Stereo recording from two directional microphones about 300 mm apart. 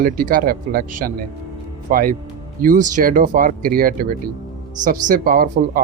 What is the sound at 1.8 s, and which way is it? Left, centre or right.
Speech, right.